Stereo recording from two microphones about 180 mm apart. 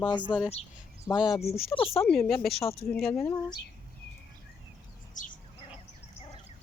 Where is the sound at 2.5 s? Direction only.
35° left (ahead or behind).